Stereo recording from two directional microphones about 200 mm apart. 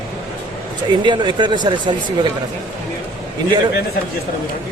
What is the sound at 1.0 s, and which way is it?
Speech, 25° right (ahead or behind).